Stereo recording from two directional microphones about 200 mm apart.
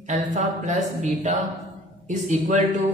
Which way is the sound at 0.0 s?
40° right (ahead or behind).